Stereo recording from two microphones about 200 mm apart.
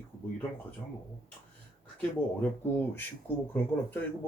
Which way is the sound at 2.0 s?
10° left (ahead or behind).